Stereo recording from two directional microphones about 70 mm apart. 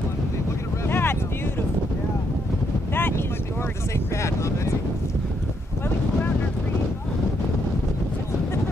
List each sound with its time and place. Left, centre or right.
0.8 s boat: left
2.9 s wind noise: left